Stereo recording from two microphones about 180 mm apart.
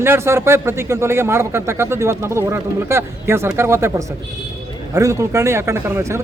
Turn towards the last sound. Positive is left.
turn(degrees=-15)  # may be behind; listen again after turning